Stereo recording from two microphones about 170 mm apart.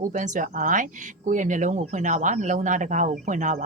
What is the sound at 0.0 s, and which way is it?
Speech, 45° right (ahead or behind).